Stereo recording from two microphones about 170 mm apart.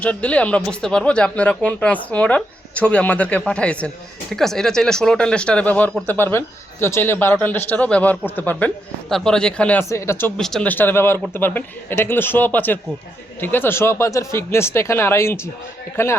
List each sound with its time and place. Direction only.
0.0 s speech: 10° left (ahead or behind)